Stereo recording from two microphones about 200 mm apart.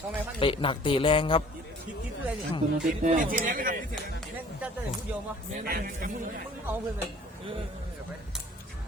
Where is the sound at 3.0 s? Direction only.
40° right (ahead or behind).